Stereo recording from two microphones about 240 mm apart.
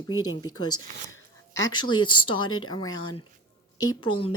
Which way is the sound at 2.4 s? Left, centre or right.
Left.